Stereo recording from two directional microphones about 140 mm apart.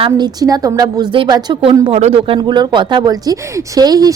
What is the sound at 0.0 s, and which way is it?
A woman's voice, 30° right (ahead or behind).